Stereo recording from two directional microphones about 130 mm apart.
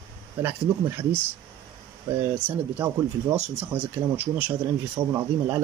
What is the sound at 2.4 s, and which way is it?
A man's voice, 20° right (ahead or behind).